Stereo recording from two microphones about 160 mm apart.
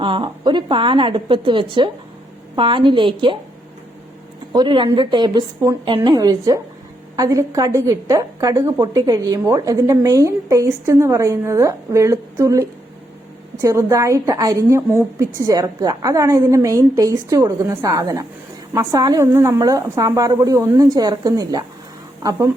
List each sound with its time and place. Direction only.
0.0 s a woman's voice: 30° right (ahead or behind)
4.5 s a woman's voice: 30° right (ahead or behind)